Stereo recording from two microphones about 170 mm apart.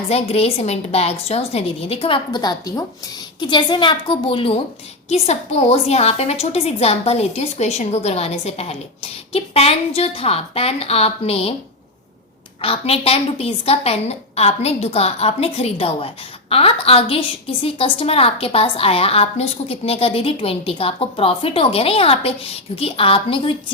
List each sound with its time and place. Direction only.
0.1 s a woman's voice: 35° left (ahead or behind)
12.6 s a woman's voice: 35° left (ahead or behind)